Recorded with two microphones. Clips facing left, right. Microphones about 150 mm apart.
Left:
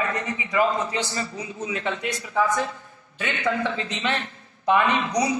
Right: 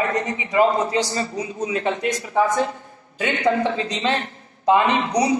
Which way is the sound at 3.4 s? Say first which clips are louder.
Right 5 dB; 30° right (ahead or behind).